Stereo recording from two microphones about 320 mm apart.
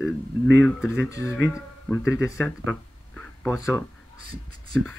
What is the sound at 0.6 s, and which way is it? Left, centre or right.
Speech, centre.